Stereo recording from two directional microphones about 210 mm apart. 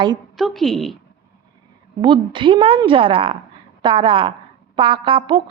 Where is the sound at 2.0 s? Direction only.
25° right (ahead or behind).